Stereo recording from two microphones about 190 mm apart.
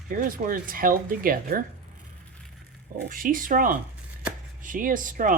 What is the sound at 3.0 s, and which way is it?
Speech, 45° right (ahead or behind).